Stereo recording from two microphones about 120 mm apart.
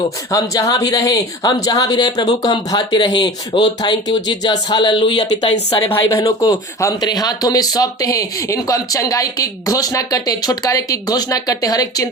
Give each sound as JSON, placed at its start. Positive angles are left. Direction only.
{"t": 0.3, "sound": "speech", "side_deg": 30}
{"t": 5.9, "sound": "speech", "side_deg": 25}